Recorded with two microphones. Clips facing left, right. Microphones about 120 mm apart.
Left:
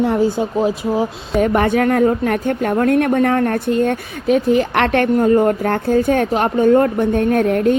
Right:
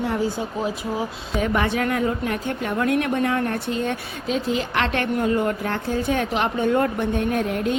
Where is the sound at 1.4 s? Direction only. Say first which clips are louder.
Left 7 dB; 45° left (ahead or behind).